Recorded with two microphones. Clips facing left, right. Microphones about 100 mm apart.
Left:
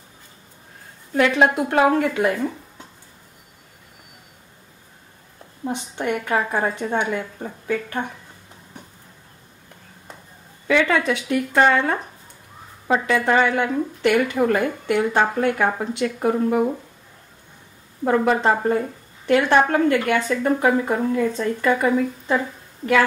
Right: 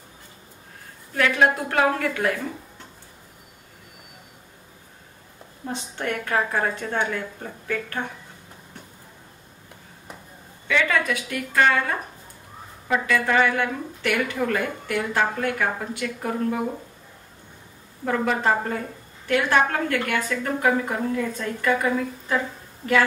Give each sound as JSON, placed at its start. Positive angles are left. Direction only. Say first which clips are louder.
{"t": 1.1, "sound": "a woman's voice", "louder": "left 3 dB", "side_deg": 25}
{"t": 5.7, "sound": "a woman's voice", "louder": "left 4 dB", "side_deg": 15}
{"t": 10.7, "sound": "a woman's voice", "louder": "left 4 dB", "side_deg": 25}
{"t": 18.0, "sound": "a woman's voice", "louder": "left 4 dB", "side_deg": 25}